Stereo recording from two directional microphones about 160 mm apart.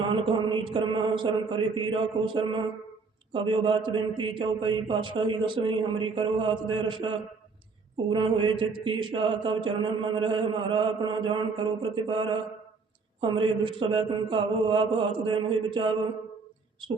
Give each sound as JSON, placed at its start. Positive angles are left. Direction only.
{"t": 0.0, "sound": "mantra", "side_deg": -30}
{"t": 8.1, "sound": "mantra", "side_deg": -30}